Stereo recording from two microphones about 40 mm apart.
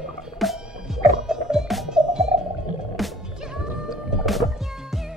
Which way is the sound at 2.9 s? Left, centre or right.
Centre.